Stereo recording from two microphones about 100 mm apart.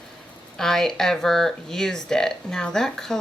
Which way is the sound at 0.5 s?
5° left (ahead or behind).